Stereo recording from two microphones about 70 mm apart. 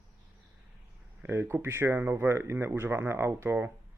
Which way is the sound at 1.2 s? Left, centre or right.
Right.